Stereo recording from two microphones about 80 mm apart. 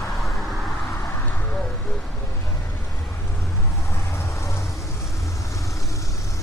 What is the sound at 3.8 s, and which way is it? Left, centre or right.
Vehicle, left.